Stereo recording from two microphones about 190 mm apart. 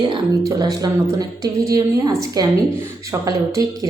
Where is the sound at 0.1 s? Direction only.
20° right (ahead or behind).